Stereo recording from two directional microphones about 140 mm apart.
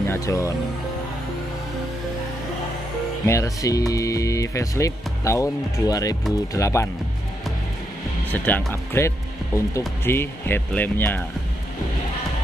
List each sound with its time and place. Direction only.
0.0 s speech: 20° left (ahead or behind)
3.3 s speech: 20° left (ahead or behind)
8.3 s speech: 10° left (ahead or behind)